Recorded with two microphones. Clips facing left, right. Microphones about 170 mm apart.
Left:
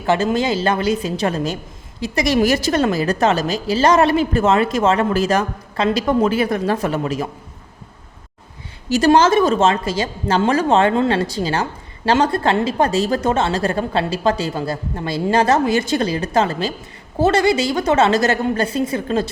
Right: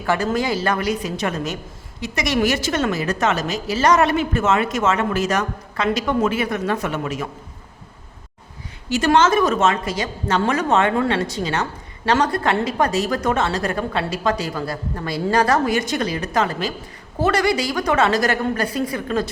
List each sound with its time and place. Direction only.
0.0 s a woman's voice: 25° left (ahead or behind)
8.9 s a woman's voice: 35° left (ahead or behind)